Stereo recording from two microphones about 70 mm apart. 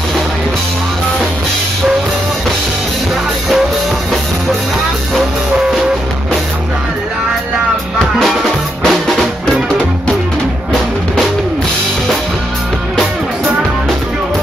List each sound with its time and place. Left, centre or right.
8.2 s music: centre